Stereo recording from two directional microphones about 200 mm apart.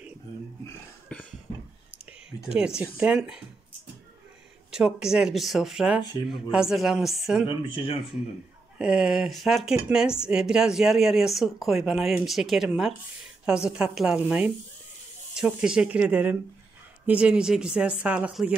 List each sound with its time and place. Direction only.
1.1 s cough: 5° left (ahead or behind)
2.5 s a woman's voice: 5° right (ahead or behind)
4.6 s a woman's voice: 5° right (ahead or behind)
7.4 s speech: 25° left (ahead or behind)
8.7 s a woman's voice: 5° right (ahead or behind)